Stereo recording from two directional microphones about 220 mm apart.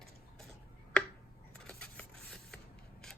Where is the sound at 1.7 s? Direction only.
5° left (ahead or behind).